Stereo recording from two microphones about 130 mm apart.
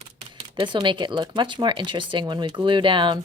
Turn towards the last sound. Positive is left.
turn(degrees=-40)  # may be behind; listen again after turning